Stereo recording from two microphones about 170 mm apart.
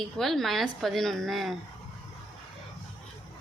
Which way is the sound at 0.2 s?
Centre (ahead or behind).